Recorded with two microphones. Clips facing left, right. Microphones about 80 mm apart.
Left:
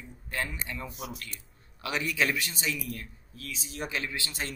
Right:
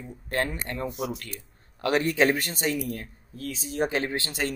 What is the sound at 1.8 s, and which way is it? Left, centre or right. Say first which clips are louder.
Speech: right 7 dB; right.